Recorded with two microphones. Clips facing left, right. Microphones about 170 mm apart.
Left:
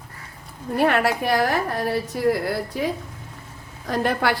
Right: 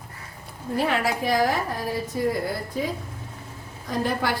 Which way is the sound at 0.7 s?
60° left (ahead or behind).